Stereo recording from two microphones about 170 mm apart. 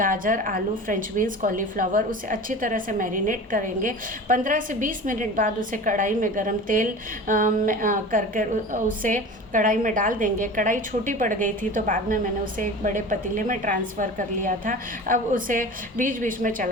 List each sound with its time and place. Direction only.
0.0 s a woman's voice: 50° right (ahead or behind)